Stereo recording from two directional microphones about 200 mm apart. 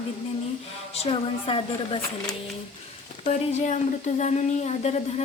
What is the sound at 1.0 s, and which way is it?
Speech, 25° left (ahead or behind).